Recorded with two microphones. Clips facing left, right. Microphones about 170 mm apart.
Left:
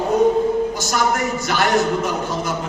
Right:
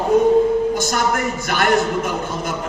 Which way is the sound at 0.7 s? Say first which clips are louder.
Right 1 dB; 55° right (ahead or behind).